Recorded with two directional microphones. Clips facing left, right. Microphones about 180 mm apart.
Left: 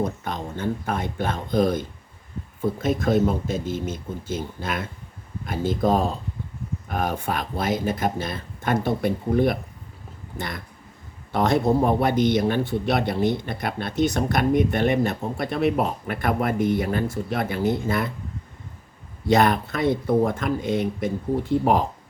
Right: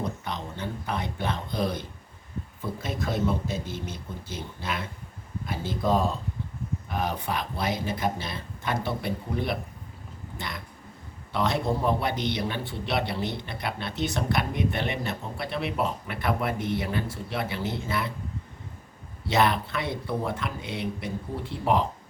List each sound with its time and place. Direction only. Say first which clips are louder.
0.0 s a man's voice: left 5 dB; 50° left (ahead or behind)
19.3 s a man's voice: left 5 dB; 45° left (ahead or behind)